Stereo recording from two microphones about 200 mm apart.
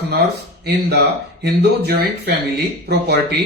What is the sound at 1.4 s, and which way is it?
Speech, 55° right (ahead or behind).